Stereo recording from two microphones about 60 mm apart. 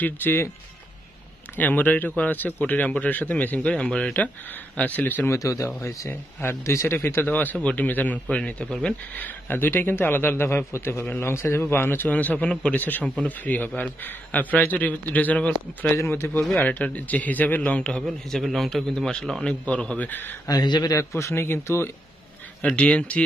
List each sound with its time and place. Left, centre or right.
0.0 s a man's voice: left
1.6 s a man's voice: left
4.7 s a man's voice: left
5.3 s speech: left
6.0 s speech: left
7.1 s a man's voice: left
8.6 s speech: centre
9.1 s a man's voice: left
12.1 s a man's voice: left
18.0 s a man's voice: centre
20.1 s a man's voice: left
20.4 s speech: left
22.6 s a man's voice: centre